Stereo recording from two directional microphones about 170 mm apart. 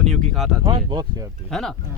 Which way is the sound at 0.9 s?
25° right (ahead or behind).